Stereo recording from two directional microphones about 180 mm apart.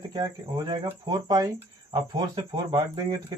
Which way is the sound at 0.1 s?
25° right (ahead or behind).